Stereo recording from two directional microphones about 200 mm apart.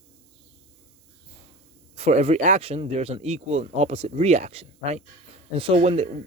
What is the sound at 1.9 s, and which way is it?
Speech, 30° right (ahead or behind).